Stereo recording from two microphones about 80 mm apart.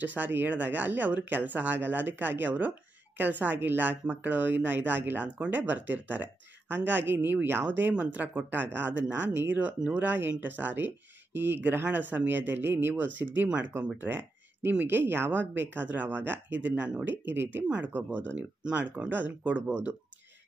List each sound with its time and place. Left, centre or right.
0.0 s speech: right
9.3 s speech: right
9.8 s speech: centre